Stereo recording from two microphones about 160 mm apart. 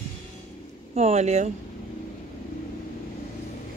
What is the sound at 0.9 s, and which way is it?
Speech, 45° right (ahead or behind).